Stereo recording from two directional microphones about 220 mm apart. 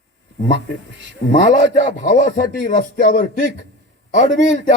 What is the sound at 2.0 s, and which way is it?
A man's voice, 35° left (ahead or behind).